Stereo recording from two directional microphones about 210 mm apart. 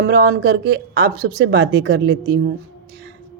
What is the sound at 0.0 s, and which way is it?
Speech, 50° right (ahead or behind).